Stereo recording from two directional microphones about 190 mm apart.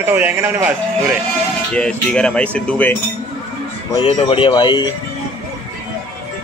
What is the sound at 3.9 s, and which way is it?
Speech, 30° left (ahead or behind).